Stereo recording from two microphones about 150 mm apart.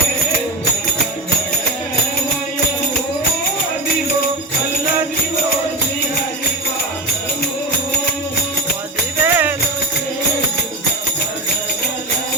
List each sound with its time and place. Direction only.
9.2 s music: 10° right (ahead or behind)